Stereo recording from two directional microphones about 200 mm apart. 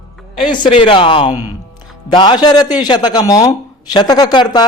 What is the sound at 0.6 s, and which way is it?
A man's voice, 25° left (ahead or behind).